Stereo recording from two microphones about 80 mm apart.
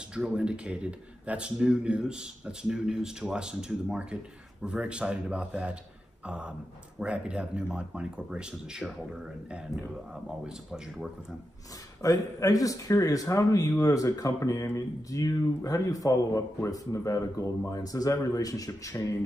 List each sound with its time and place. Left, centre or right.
0.1 s a man's voice: centre
12.0 s a man's voice: left